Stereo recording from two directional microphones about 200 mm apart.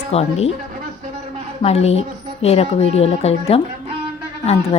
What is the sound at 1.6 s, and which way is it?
A woman's voice, 30° left (ahead or behind).